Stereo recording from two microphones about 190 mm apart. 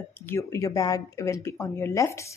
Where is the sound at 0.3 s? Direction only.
15° left (ahead or behind).